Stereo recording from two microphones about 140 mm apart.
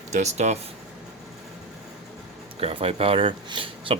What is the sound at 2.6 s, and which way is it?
Speech, 45° right (ahead or behind).